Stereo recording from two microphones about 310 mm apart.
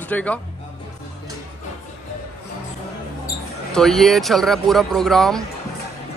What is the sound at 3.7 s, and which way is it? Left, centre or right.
Speech, centre.